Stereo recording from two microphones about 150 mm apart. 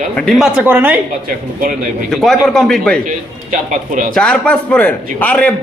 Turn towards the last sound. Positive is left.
turn(degrees=10)  # may be behind; listen again after turning